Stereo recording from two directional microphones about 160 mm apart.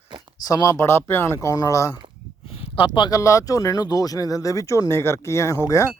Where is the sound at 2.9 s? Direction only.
25° left (ahead or behind).